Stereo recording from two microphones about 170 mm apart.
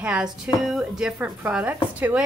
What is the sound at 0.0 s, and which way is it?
Speech, 5° right (ahead or behind).